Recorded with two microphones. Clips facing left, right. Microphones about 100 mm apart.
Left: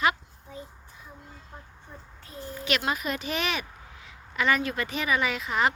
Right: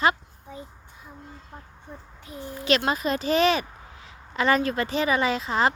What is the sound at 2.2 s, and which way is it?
Speech, 15° right (ahead or behind).